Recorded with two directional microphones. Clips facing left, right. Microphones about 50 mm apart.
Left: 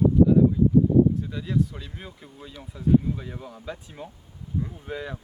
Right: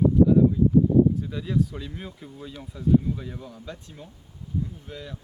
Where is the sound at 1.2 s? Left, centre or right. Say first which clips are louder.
Even; centre.